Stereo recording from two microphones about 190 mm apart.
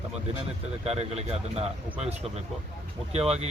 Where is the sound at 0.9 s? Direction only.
35° right (ahead or behind).